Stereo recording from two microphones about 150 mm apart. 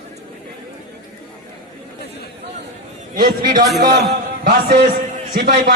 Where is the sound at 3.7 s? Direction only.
90° right.